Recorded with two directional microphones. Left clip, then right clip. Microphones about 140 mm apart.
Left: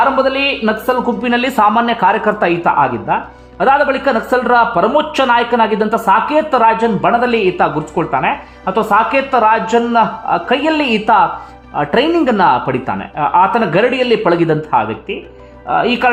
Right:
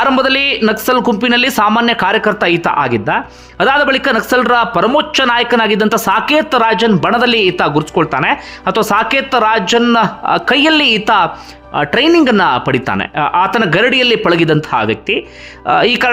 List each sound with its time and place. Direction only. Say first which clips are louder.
0.0 s speech: right 1 dB; 35° right (ahead or behind)
1.1 s speech: right 3 dB; 20° right (ahead or behind)